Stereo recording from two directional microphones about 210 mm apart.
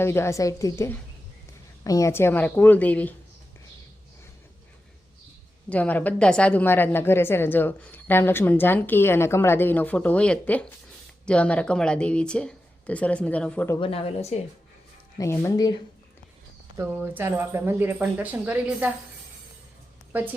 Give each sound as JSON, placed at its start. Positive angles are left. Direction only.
{"t": 0.0, "sound": "a woman's voice", "side_deg": 10}
{"t": 5.6, "sound": "a woman's voice", "side_deg": 5}
{"t": 13.7, "sound": "speech", "side_deg": 25}
{"t": 15.2, "sound": "a woman's voice", "side_deg": 15}
{"t": 16.7, "sound": "speech", "side_deg": -10}
{"t": 20.1, "sound": "speech", "side_deg": -10}